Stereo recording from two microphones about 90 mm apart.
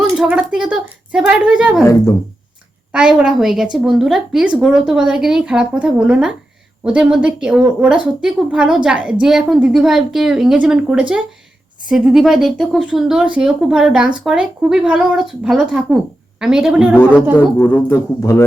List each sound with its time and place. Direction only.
0.2 s a woman's voice: 15° right (ahead or behind)
2.9 s a woman's voice: 10° right (ahead or behind)
17.3 s speech: 25° left (ahead or behind)